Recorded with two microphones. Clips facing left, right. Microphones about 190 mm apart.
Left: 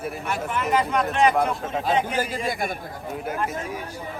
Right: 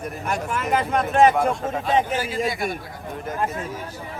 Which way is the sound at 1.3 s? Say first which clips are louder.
Right 1 dB; centre (ahead or behind).